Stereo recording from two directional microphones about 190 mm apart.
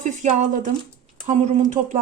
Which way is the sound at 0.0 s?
40° right (ahead or behind).